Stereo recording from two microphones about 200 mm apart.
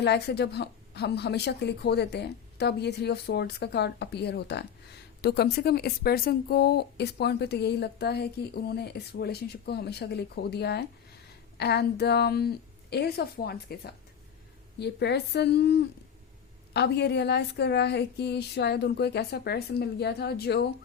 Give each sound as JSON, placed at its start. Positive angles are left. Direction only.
{"t": 0.0, "sound": "a woman's voice", "side_deg": 55}